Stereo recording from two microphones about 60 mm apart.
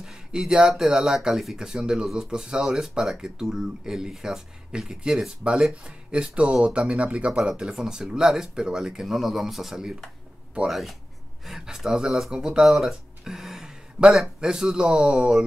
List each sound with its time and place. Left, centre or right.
0.0 s speech: centre
6.1 s speech: right